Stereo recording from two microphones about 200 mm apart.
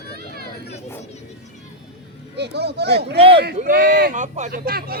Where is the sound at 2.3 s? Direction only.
55° right (ahead or behind).